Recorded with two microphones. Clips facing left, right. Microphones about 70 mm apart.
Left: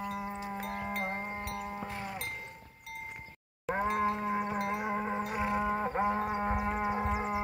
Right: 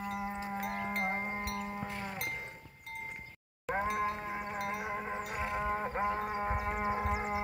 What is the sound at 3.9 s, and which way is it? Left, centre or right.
Livestock, left.